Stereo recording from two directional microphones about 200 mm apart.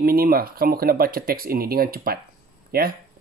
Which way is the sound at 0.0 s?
50° right (ahead or behind).